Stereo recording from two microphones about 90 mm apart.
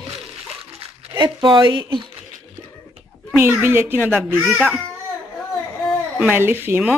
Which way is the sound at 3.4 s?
25° right (ahead or behind).